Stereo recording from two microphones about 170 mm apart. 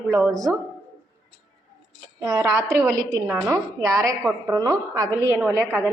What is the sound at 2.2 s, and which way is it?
A woman's voice, 20° right (ahead or behind).